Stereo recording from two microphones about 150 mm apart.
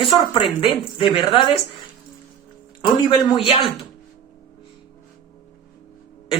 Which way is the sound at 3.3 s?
35° left (ahead or behind).